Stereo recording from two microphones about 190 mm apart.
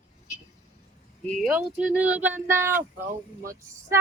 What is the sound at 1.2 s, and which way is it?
Speech, centre (ahead or behind).